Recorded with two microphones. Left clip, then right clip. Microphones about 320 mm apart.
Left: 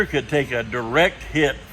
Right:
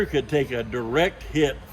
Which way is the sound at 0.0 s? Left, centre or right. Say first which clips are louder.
Left 2 dB; centre.